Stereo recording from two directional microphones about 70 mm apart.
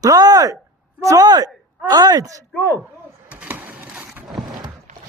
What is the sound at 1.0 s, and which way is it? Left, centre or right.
Speech, right.